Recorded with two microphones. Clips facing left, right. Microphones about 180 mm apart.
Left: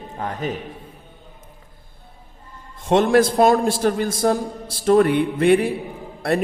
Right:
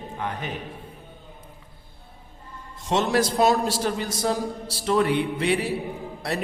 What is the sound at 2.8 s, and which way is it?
A man's voice, 55° left (ahead or behind).